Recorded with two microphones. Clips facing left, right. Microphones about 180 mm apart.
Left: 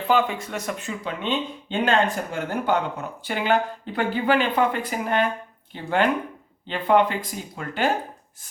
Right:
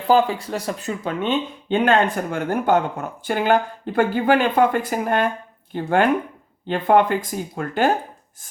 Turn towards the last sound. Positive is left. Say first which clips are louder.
# right 5 dB
turn(degrees=-45)  # may be behind; listen again after turning